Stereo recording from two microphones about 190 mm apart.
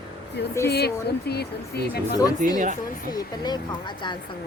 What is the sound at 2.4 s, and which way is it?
Speech, 40° right (ahead or behind).